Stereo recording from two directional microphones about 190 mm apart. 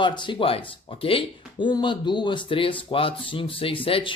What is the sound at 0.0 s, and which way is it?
Speech, 25° left (ahead or behind).